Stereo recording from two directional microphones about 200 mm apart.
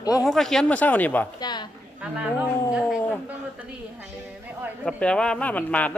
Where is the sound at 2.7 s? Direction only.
5° right (ahead or behind).